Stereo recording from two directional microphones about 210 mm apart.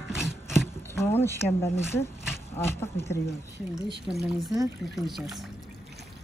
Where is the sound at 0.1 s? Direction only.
Centre (ahead or behind).